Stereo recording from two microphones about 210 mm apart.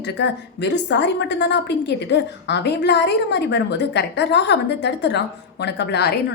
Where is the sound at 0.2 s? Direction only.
55° left (ahead or behind).